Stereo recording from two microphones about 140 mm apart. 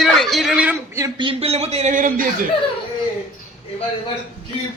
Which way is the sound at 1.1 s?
40° right (ahead or behind).